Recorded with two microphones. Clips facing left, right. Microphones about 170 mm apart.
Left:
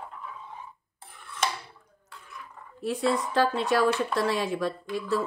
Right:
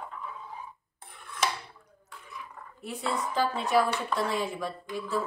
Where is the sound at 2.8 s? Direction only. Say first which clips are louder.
Left 6 dB; 80° left.